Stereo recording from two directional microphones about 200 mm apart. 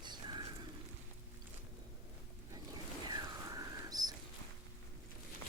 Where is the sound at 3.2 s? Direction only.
20° right (ahead or behind).